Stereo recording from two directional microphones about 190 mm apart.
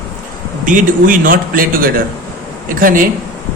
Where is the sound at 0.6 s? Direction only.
45° right (ahead or behind).